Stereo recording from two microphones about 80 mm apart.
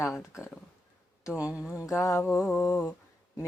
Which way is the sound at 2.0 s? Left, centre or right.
Left.